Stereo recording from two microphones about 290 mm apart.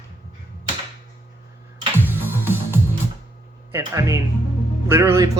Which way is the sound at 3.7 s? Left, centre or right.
Centre.